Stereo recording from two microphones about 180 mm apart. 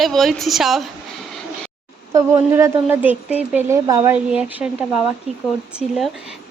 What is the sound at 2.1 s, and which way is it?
A woman's voice, 15° right (ahead or behind).